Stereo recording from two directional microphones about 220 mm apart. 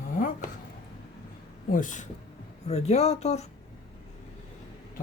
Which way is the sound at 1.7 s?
35° left (ahead or behind).